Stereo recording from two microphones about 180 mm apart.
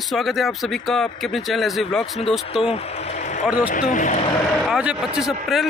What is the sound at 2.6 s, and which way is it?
Speech, 35° left (ahead or behind).